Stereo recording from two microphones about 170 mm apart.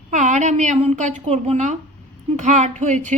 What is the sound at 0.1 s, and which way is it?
Speech, 45° right (ahead or behind).